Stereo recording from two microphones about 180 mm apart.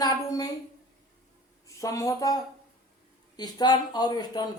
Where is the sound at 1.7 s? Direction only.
20° left (ahead or behind).